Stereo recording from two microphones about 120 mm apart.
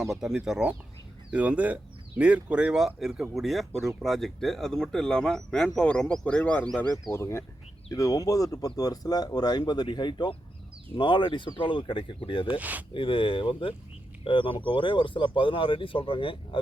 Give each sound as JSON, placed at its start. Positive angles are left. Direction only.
{"t": 0.0, "sound": "speech", "side_deg": -5}
{"t": 7.1, "sound": "speech", "side_deg": 20}
{"t": 12.5, "sound": "speech", "side_deg": -15}
{"t": 12.9, "sound": "speech", "side_deg": 45}